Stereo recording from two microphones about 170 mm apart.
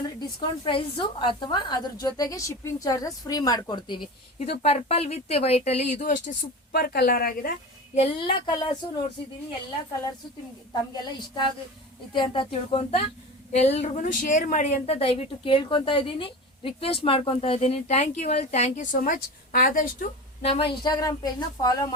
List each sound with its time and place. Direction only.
0.2 s a woman's voice: 30° left (ahead or behind)
4.6 s a woman's voice: 35° left (ahead or behind)
6.7 s a woman's voice: 65° left (ahead or behind)
7.9 s a woman's voice: 35° left (ahead or behind)
10.9 s a woman's voice: 25° left (ahead or behind); by 20.1 s 55° left (ahead or behind)
20.4 s a woman's voice: 35° left (ahead or behind)